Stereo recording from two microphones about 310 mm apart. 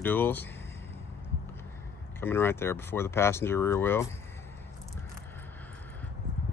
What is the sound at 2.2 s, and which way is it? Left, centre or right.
Speech, centre.